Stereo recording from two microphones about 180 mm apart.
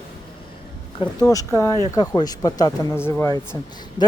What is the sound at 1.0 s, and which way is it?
Speech, 20° left (ahead or behind).